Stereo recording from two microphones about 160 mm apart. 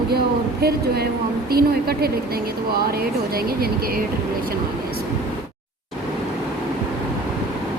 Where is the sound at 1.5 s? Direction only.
75° right (ahead or behind).